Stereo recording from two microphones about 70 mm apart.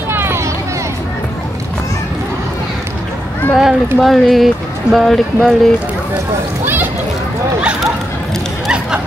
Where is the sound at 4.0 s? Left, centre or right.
Centre.